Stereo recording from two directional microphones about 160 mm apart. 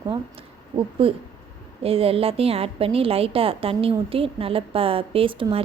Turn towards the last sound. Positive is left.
turn(degrees=-35)  # may be behind; listen again after turning